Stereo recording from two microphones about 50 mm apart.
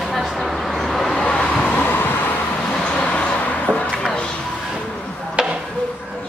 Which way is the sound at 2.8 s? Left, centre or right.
Left.